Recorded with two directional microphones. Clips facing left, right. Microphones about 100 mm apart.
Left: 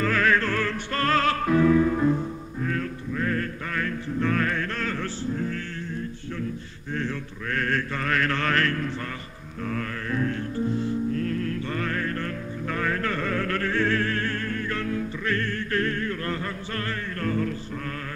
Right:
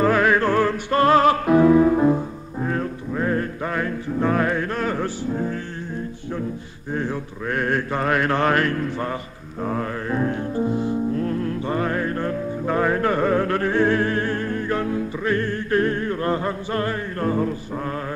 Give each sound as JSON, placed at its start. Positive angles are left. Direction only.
{"t": 0.0, "sound": "music", "side_deg": -20}
{"t": 6.9, "sound": "mantra", "side_deg": -15}
{"t": 10.7, "sound": "music", "side_deg": -15}